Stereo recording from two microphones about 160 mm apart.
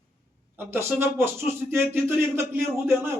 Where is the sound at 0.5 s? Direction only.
15° right (ahead or behind).